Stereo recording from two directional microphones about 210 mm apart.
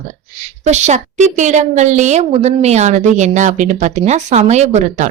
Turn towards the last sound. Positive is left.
turn(degrees=-35)  # may be behind; listen again after turning